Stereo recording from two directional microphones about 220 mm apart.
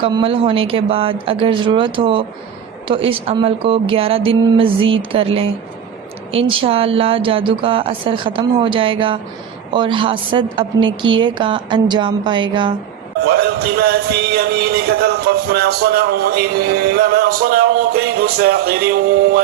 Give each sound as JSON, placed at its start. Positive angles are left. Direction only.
{"t": 0.0, "sound": "a woman's voice", "side_deg": -25}
{"t": 13.2, "sound": "music", "side_deg": -45}